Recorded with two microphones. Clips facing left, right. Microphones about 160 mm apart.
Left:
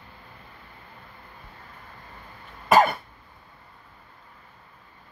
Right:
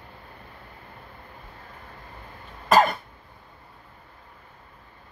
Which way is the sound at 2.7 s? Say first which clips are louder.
Even; 10° left (ahead or behind).